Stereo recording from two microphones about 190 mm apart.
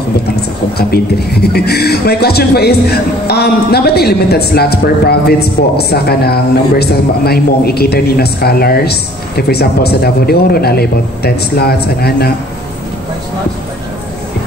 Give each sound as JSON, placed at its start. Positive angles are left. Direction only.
{"t": 0.7, "sound": "speech", "side_deg": 55}